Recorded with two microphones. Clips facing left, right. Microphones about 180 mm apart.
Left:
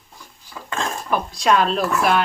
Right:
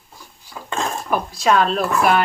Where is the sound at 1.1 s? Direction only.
5° right (ahead or behind).